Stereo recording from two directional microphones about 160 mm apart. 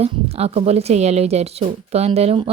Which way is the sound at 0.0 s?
40° right (ahead or behind).